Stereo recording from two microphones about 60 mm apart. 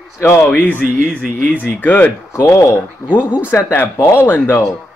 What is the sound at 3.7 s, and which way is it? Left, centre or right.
Speech, left.